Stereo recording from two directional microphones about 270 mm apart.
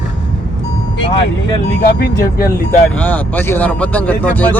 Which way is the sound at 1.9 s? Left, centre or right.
Left.